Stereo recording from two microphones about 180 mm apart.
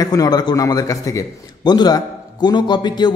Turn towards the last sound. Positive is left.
turn(degrees=25)  # may be behind; listen again after turning